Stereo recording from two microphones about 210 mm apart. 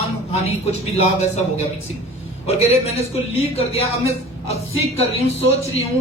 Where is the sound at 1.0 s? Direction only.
30° left (ahead or behind).